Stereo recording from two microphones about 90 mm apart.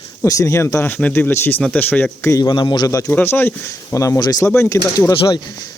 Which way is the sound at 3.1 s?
25° left (ahead or behind).